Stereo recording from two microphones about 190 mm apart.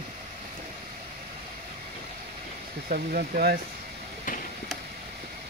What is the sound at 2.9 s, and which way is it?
Speech, 50° right (ahead or behind).